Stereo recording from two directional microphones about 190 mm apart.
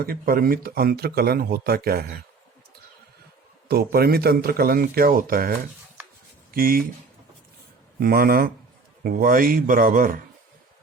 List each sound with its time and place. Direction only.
0.0 s speech: 50° right (ahead or behind)
3.7 s speech: 55° right (ahead or behind)
7.9 s speech: 50° right (ahead or behind)